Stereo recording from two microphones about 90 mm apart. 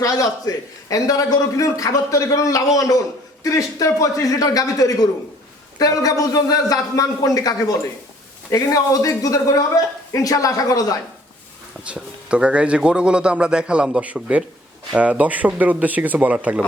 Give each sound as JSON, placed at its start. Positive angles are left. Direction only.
{"t": 0.0, "sound": "a man's voice", "side_deg": 40}
{"t": 11.9, "sound": "a man's voice", "side_deg": -10}